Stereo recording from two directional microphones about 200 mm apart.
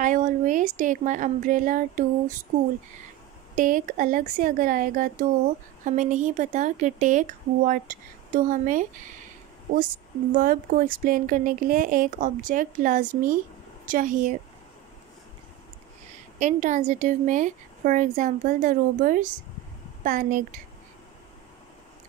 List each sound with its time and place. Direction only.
0.0 s a woman's voice: 40° right (ahead or behind)
3.5 s a woman's voice: 40° right (ahead or behind)
10.3 s a woman's voice: 45° right (ahead or behind)
16.3 s a woman's voice: 40° right (ahead or behind)